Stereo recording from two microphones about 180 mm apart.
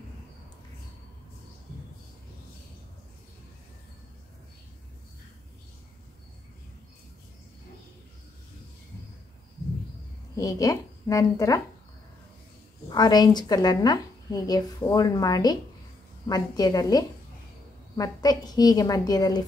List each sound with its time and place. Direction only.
10.3 s a woman's voice: 20° left (ahead or behind)
12.9 s a woman's voice: 20° left (ahead or behind)